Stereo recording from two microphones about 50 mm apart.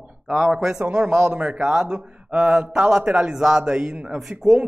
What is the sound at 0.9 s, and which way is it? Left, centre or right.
A man's voice, centre.